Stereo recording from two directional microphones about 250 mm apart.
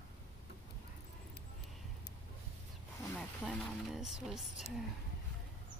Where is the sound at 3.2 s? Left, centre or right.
Centre.